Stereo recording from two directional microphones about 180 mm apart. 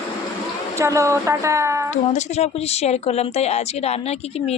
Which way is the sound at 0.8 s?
15° right (ahead or behind).